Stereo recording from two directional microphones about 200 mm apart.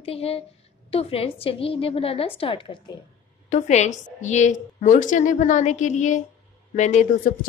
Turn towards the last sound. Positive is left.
turn(degrees=35)  # may be behind; listen again after turning